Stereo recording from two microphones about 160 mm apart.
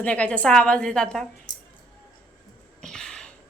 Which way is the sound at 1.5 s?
25° left (ahead or behind).